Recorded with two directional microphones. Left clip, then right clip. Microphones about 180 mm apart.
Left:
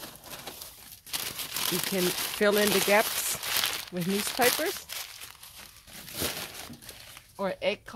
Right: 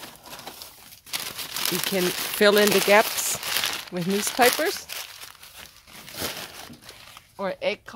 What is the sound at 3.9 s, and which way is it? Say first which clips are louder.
Speech: right 4 dB; 60° right (ahead or behind).